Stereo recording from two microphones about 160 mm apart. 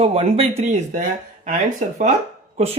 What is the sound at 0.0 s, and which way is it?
Speech, 40° right (ahead or behind).